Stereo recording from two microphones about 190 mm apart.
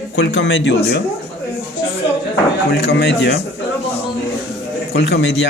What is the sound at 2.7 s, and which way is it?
Speech, 65° left (ahead or behind).